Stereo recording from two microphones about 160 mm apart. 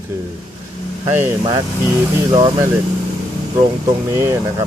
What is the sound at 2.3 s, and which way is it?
Speech, 25° right (ahead or behind).